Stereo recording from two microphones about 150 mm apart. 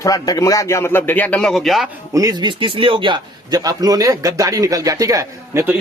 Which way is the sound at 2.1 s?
25° right (ahead or behind).